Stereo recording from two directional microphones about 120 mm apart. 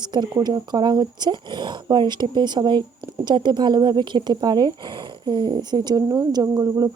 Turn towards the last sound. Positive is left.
turn(degrees=-30)  # may be behind; listen again after turning